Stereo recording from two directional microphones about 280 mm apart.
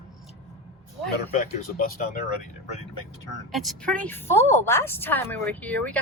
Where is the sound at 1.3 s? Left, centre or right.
Left.